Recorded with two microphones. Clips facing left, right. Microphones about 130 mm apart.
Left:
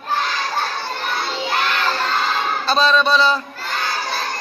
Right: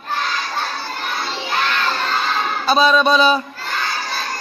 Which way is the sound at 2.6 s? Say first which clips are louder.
Right 3 dB; 10° right (ahead or behind).